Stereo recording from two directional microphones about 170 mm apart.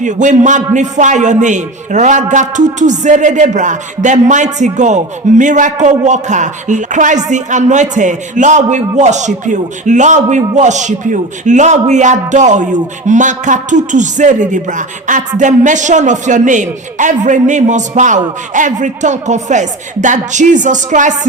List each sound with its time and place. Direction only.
0.0 s a man's voice: 45° right (ahead or behind)